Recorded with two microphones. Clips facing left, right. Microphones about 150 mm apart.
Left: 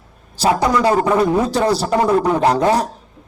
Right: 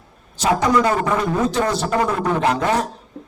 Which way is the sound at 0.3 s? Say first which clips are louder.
Left 1 dB; 35° left (ahead or behind).